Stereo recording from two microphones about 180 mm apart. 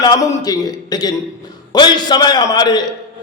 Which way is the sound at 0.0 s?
25° left (ahead or behind).